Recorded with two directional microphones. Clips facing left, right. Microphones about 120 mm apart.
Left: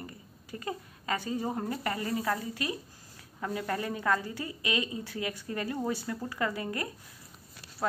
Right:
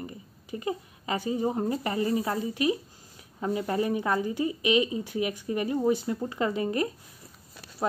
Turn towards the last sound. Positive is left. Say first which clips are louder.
# right 6 dB
turn(degrees=-20)  # may be behind; listen again after turning